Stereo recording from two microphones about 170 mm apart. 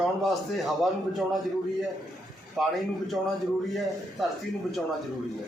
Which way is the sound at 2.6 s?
Centre (ahead or behind).